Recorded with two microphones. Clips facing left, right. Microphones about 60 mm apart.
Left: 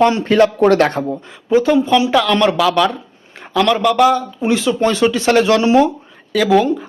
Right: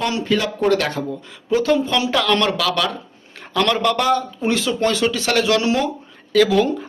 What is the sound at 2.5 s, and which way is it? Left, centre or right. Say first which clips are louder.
Speech: left 6 dB; centre.